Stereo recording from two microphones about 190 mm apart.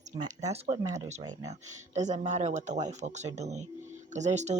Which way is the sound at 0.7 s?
20° right (ahead or behind).